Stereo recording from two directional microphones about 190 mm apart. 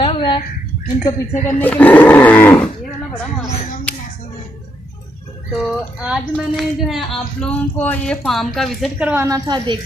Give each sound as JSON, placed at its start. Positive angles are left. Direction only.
{"t": 0.0, "sound": "a sound", "side_deg": 25}
{"t": 1.3, "sound": "speech", "side_deg": 40}
{"t": 1.6, "sound": "roaring cats", "side_deg": 10}
{"t": 3.4, "sound": "a sound", "side_deg": 35}
{"t": 6.0, "sound": "speech", "side_deg": 0}
{"t": 9.1, "sound": "a woman's voice", "side_deg": -15}